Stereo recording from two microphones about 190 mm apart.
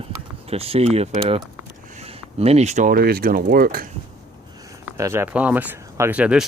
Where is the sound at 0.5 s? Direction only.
30° right (ahead or behind); by 3.8 s 50° right (ahead or behind).